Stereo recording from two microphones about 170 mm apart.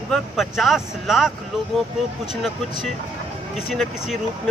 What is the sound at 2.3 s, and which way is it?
Speech, centre (ahead or behind).